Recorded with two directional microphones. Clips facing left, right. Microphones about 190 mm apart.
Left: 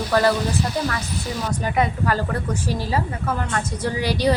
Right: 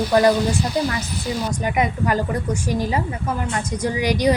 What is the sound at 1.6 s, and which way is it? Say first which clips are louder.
A woman's voice: left 1 dB; 15° right (ahead or behind).